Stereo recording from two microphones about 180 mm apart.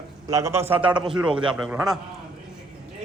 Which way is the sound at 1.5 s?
5° right (ahead or behind).